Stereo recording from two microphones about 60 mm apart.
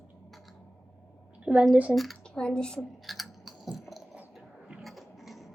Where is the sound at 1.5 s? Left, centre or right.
Centre.